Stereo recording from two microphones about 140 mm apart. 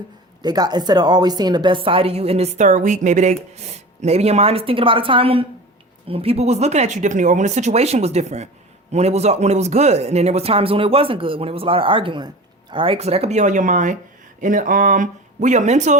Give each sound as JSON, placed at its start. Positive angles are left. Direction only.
{"t": 0.4, "sound": "a woman's voice", "side_deg": -30}